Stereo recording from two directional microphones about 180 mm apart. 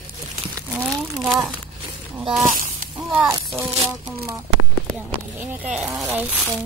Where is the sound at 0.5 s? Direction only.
15° right (ahead or behind).